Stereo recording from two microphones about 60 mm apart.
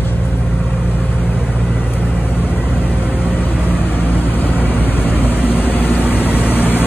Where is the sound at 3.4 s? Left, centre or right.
Left.